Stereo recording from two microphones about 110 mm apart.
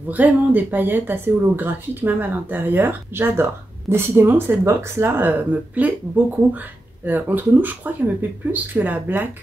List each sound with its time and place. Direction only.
0.1 s speech: 15° right (ahead or behind)